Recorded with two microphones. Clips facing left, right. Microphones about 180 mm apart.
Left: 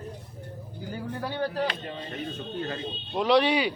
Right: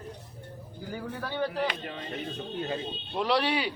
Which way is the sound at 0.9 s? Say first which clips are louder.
Left 2 dB; 15° left (ahead or behind).